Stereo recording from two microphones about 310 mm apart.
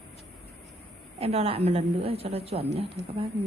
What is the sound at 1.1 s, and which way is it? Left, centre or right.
A woman's voice, centre.